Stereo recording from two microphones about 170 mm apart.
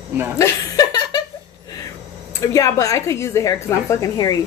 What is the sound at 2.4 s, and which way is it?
A woman's voice, 20° left (ahead or behind).